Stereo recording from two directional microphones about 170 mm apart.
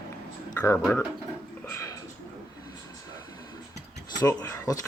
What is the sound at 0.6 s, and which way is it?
Speech, 15° left (ahead or behind).